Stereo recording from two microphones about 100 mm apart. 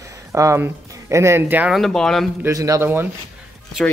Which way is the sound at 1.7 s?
5° left (ahead or behind).